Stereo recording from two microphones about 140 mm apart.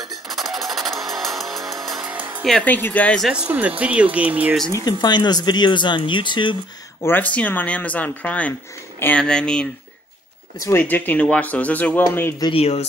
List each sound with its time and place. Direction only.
0.3 s a sound: centre (ahead or behind)
0.7 s music: centre (ahead or behind)
2.1 s music: 15° right (ahead or behind)
2.4 s speech: 10° left (ahead or behind)
3.3 s speech: 5° right (ahead or behind)
4.8 s speech: 30° left (ahead or behind)
7.0 s speech: 15° left (ahead or behind)
12.4 s speech: 35° left (ahead or behind)